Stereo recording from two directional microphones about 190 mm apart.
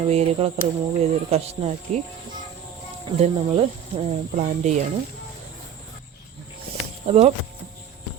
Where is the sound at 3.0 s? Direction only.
35° right (ahead or behind).